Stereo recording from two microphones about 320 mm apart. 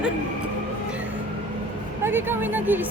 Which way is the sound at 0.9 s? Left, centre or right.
Centre.